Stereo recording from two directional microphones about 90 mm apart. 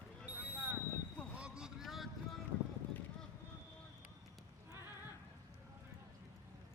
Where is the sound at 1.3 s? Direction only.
10° right (ahead or behind).